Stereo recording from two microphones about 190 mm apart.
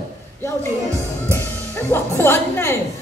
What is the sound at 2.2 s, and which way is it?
Speech, 10° left (ahead or behind).